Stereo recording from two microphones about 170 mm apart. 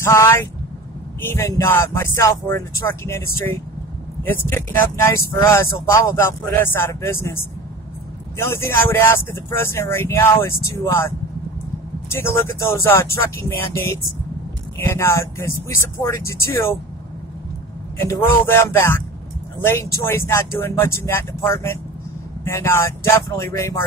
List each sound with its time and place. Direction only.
0.0 s speech: 15° left (ahead or behind)
8.4 s speech: 15° left (ahead or behind)
18.0 s speech: 15° left (ahead or behind)